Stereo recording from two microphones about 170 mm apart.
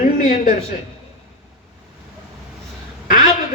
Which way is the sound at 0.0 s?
50° left (ahead or behind).